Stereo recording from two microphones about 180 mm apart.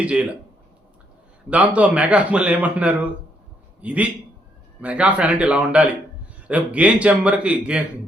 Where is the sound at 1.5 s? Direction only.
10° right (ahead or behind).